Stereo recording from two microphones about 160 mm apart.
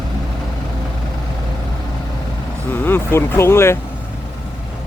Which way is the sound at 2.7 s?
15° left (ahead or behind).